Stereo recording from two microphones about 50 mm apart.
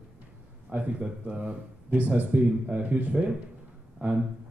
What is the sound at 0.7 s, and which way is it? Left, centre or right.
Speech, right.